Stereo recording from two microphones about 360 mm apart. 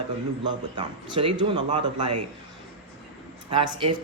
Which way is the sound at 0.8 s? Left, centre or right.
Centre.